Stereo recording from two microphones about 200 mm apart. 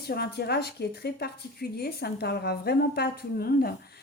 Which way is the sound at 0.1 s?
55° left (ahead or behind).